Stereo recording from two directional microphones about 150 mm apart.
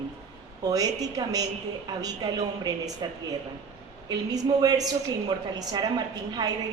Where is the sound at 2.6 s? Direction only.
25° right (ahead or behind).